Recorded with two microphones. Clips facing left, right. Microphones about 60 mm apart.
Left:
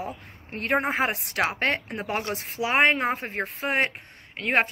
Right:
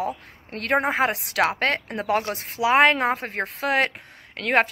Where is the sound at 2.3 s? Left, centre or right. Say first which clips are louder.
Right 5 dB; right.